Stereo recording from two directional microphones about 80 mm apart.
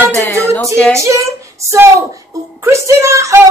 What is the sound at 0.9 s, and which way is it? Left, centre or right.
Speech, right.